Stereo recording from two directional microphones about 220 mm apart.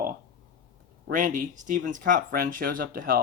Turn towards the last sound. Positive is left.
turn(degrees=-40)  # may be behind; listen again after turning